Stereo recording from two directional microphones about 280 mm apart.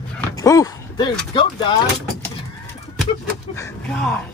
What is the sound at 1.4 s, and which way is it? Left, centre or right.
Speech, centre.